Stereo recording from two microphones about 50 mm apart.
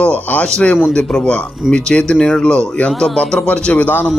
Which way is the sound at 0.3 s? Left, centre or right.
Left.